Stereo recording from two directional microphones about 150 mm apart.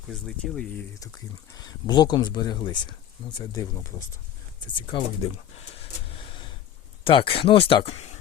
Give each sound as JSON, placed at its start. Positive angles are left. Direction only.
{"t": 0.1, "sound": "speech", "side_deg": 0}
{"t": 0.9, "sound": "speech", "side_deg": 20}
{"t": 4.6, "sound": "speech", "side_deg": 30}
{"t": 5.5, "sound": "a sound", "side_deg": 40}
{"t": 7.0, "sound": "speech", "side_deg": 35}